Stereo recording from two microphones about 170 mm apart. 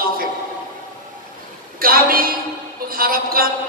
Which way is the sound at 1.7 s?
60° right (ahead or behind).